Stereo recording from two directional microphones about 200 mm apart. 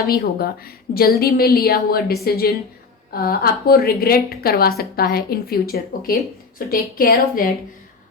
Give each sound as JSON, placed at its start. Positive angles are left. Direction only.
{"t": 0.1, "sound": "a woman's voice", "side_deg": 50}